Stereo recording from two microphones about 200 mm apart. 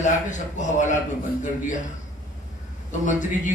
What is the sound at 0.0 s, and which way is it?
Speech, 40° left (ahead or behind).